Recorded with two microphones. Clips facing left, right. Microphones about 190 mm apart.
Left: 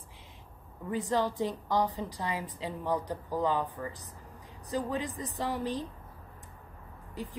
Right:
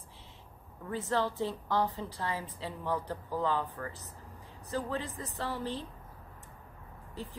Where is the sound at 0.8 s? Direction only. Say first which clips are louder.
Left 2 dB; 15° left (ahead or behind).